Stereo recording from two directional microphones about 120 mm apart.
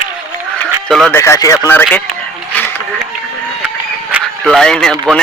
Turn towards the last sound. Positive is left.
turn(degrees=5)  # may be behind; listen again after turning